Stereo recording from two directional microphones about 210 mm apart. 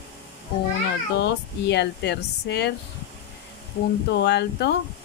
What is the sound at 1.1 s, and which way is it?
Speech, 55° left (ahead or behind).